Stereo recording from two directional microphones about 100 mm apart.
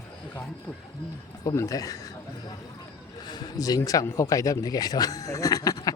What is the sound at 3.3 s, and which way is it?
Speech, 45° left (ahead or behind).